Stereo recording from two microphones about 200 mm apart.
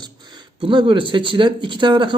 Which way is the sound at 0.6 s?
25° right (ahead or behind).